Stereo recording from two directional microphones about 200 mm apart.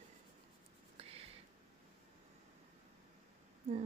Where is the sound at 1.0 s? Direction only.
30° right (ahead or behind).